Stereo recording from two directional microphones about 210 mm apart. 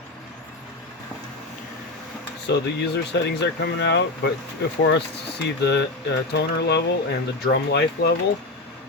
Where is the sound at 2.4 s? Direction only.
55° left (ahead or behind).